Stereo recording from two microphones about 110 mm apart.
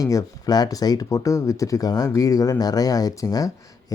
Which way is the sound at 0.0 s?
30° left (ahead or behind).